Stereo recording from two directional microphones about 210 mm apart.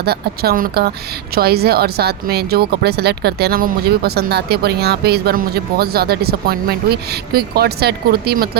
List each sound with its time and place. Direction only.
0.0 s speech: 50° right (ahead or behind)